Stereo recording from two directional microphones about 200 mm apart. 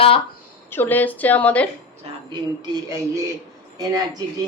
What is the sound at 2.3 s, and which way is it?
Speech, 20° right (ahead or behind).